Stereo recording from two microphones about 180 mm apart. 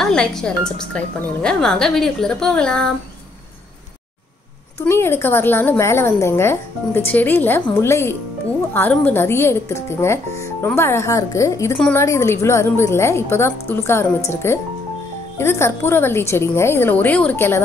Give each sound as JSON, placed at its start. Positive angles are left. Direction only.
{"t": 0.0, "sound": "speech", "side_deg": 5}
{"t": 4.8, "sound": "speech", "side_deg": 15}